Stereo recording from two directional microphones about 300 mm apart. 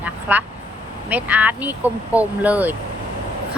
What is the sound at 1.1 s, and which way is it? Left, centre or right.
Speech, centre.